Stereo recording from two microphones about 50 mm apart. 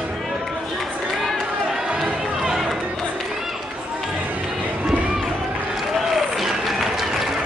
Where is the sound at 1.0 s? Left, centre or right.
Centre.